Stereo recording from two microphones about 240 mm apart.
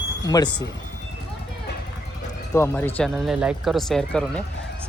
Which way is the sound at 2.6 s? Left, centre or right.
Centre.